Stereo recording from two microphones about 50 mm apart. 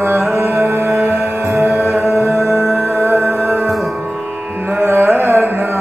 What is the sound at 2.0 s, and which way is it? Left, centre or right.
Music, centre.